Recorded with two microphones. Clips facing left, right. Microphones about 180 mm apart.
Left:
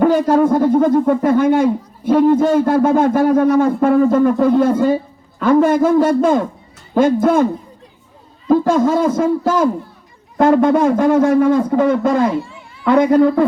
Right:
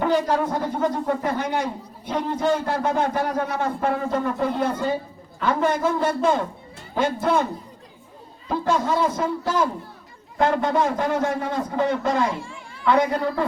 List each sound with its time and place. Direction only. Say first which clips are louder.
0.0 s speech: left 9 dB; 50° left (ahead or behind)
8.4 s speech: left 9 dB; 45° left (ahead or behind)